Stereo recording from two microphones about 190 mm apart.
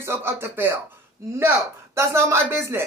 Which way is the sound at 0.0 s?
15° right (ahead or behind).